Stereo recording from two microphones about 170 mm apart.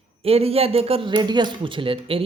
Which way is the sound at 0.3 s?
35° right (ahead or behind).